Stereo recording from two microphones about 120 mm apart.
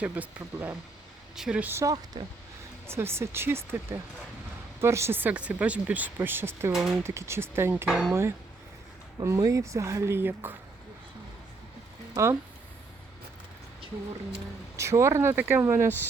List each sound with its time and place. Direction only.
0.0 s speech: 10° right (ahead or behind)
2.8 s speech: 20° right (ahead or behind)
6.7 s speech: centre (ahead or behind)
7.0 s speech: 20° right (ahead or behind)
7.9 s speech: centre (ahead or behind)
8.1 s speech: 20° right (ahead or behind)
12.1 s speech: 25° right (ahead or behind)
14.8 s speech: 25° right (ahead or behind)